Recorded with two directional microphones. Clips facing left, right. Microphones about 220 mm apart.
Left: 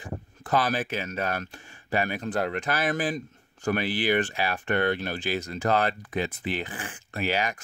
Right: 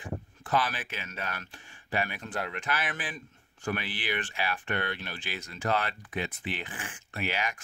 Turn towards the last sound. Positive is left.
turn(degrees=40)  # may be behind; listen again after turning